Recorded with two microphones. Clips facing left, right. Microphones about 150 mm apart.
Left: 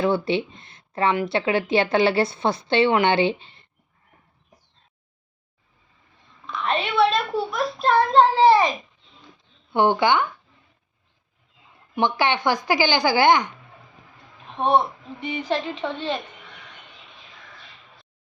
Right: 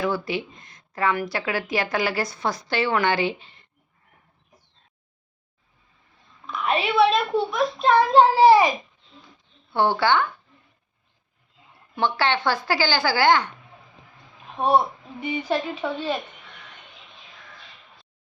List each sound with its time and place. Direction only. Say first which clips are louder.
0.0 s speech: left 4 dB; 25° left (ahead or behind)
6.6 s a child's voice: right 1 dB; 5° right (ahead or behind)
9.7 s speech: left 2 dB; 20° left (ahead or behind)
11.9 s speech: left 1 dB; 15° left (ahead or behind)
14.5 s speech: even; 5° right (ahead or behind)